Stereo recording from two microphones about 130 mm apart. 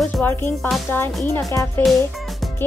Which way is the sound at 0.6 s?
Centre (ahead or behind).